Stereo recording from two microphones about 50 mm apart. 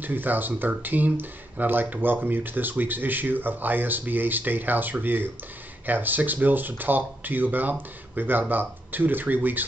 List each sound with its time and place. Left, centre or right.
0.0 s speech: right